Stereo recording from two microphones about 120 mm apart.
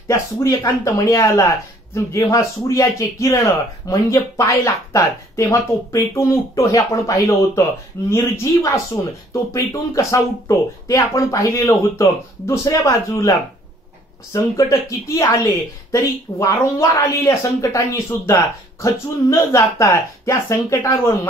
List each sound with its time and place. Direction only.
0.1 s speech: 25° left (ahead or behind)